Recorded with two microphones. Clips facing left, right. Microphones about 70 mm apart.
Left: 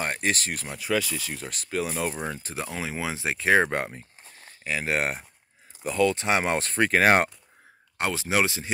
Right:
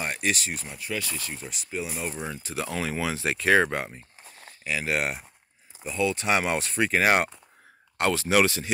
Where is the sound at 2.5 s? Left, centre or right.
Left.